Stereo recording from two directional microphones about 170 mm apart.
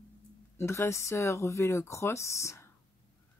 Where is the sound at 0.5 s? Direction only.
15° left (ahead or behind).